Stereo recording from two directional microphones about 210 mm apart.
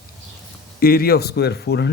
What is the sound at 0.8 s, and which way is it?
Speech, 45° left (ahead or behind).